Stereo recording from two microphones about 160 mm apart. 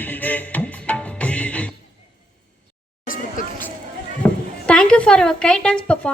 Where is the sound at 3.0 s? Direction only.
60° left (ahead or behind).